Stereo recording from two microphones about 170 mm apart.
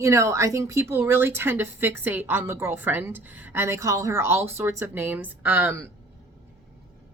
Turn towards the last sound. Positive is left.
turn(degrees=-10)  # may be behind; listen again after turning